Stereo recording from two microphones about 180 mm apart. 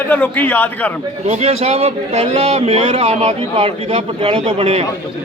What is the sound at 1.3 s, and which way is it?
A man's voice, 35° right (ahead or behind).